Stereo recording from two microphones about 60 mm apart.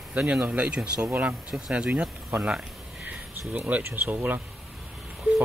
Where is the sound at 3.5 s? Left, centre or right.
Right.